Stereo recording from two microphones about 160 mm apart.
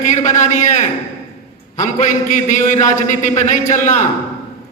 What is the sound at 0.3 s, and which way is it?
Speech, 50° left (ahead or behind).